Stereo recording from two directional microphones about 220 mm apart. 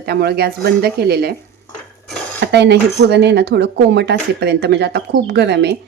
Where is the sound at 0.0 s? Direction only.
45° right (ahead or behind).